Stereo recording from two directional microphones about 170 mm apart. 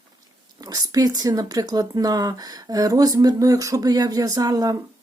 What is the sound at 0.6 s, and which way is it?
Speech, 20° right (ahead or behind).